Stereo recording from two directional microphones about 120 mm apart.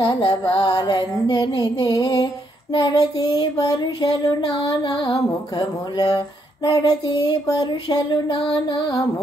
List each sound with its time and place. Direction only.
0.0 s music: 40° left (ahead or behind)
7.1 s music: 40° left (ahead or behind)